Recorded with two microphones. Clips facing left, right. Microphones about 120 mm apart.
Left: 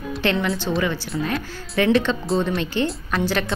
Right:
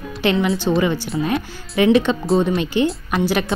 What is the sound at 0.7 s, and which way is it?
A woman's voice, 25° right (ahead or behind).